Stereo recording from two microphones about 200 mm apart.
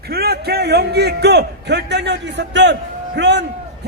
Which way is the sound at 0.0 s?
50° right (ahead or behind).